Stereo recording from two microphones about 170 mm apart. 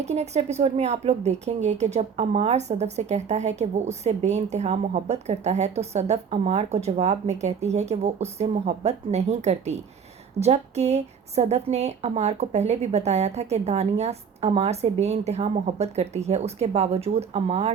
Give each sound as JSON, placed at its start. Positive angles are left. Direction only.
{"t": 0.0, "sound": "a woman's voice", "side_deg": -40}